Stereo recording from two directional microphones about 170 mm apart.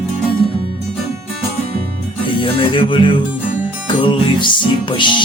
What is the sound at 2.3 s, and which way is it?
Music, 30° left (ahead or behind).